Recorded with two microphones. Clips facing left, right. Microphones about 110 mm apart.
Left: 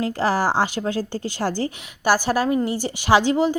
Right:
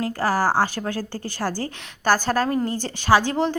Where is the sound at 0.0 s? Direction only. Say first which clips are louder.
Left 1 dB; 20° left (ahead or behind).